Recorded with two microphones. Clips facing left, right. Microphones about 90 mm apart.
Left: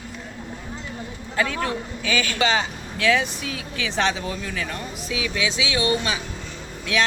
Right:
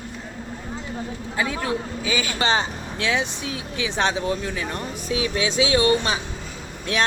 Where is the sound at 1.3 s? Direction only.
15° right (ahead or behind).